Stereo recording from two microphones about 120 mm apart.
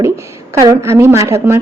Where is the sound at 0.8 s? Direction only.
20° right (ahead or behind).